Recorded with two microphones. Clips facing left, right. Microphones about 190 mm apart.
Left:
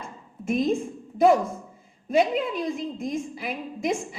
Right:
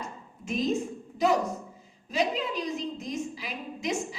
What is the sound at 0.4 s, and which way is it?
A woman's voice, 50° left (ahead or behind).